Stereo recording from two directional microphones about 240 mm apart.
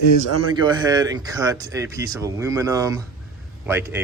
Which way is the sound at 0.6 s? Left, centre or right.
Centre.